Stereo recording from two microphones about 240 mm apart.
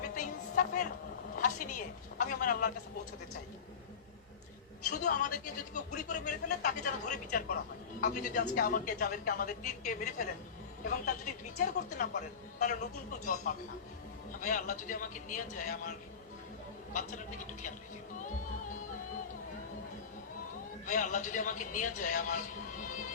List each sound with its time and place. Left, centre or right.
0.1 s music: left
1.4 s a woman's voice: left
4.9 s a woman's voice: left
13.5 s a woman's voice: left
20.8 s a woman's voice: left